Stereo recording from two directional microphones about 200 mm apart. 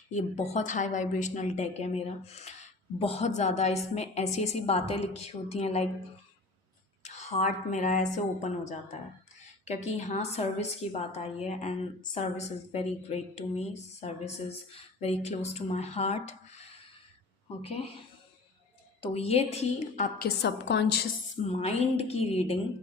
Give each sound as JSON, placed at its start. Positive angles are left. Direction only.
{"t": 0.1, "sound": "a woman's voice", "side_deg": 35}
{"t": 7.0, "sound": "a woman's voice", "side_deg": 35}
{"t": 19.0, "sound": "a woman's voice", "side_deg": 30}
{"t": 20.1, "sound": "a woman's voice", "side_deg": 55}
{"t": 21.5, "sound": "a woman's voice", "side_deg": 30}